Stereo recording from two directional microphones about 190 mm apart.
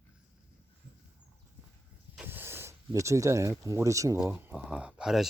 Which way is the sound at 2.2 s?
10° right (ahead or behind).